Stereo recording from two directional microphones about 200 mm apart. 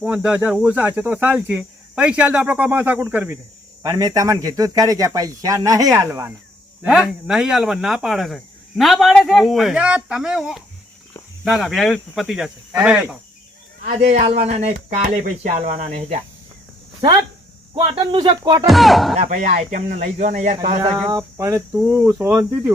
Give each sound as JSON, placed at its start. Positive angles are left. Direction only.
{"t": 0.0, "sound": "speech", "side_deg": -5}
{"t": 14.4, "sound": "speech", "side_deg": -35}
{"t": 17.7, "sound": "speech", "side_deg": -25}
{"t": 18.6, "sound": "speech", "side_deg": 0}
{"t": 19.1, "sound": "speech", "side_deg": -40}
{"t": 21.0, "sound": "speech", "side_deg": -15}